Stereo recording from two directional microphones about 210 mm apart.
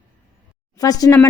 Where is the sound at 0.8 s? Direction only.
15° left (ahead or behind).